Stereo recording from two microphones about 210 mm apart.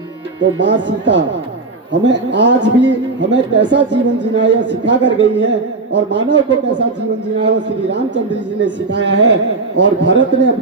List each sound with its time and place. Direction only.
0.4 s a man's voice: 60° right (ahead or behind)